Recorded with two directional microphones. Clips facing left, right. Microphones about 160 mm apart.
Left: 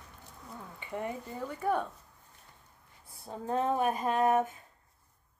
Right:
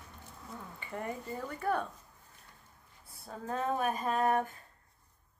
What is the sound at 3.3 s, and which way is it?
Speech, 25° left (ahead or behind).